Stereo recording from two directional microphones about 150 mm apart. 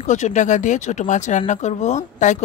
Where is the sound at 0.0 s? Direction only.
55° left (ahead or behind).